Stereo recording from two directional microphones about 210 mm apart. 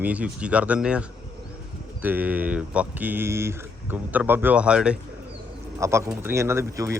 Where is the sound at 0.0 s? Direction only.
5° right (ahead or behind).